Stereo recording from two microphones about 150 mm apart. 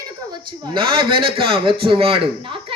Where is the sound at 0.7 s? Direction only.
35° right (ahead or behind).